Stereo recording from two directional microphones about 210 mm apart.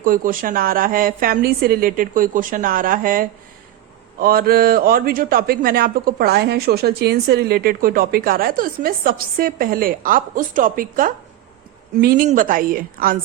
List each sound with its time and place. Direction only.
0.0 s a woman's voice: 40° right (ahead or behind)